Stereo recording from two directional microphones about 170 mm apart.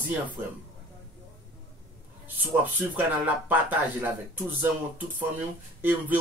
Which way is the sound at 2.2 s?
10° right (ahead or behind).